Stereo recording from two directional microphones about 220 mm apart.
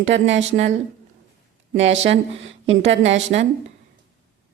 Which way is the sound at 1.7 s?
55° right (ahead or behind).